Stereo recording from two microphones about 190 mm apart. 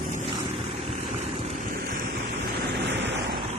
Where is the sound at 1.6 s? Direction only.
45° right (ahead or behind); by 3.3 s 65° right (ahead or behind).